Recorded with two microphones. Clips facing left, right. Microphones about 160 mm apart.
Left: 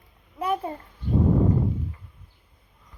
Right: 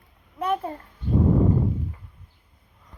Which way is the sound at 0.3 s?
10° left (ahead or behind).